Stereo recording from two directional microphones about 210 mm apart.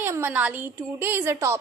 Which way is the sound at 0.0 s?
10° right (ahead or behind).